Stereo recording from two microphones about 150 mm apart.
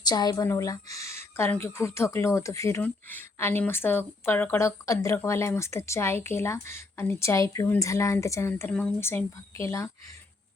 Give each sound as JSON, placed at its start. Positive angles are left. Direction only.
{"t": 0.1, "sound": "a woman's voice", "side_deg": 25}